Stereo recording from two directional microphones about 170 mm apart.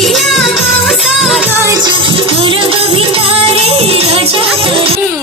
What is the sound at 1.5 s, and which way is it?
Music, 15° right (ahead or behind).